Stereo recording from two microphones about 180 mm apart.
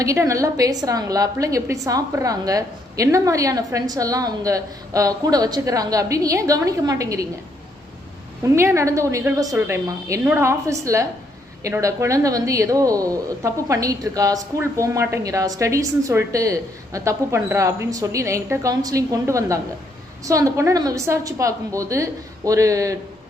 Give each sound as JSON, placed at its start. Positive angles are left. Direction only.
{"t": 0.0, "sound": "a woman's voice", "side_deg": -15}
{"t": 8.5, "sound": "a woman's voice", "side_deg": -15}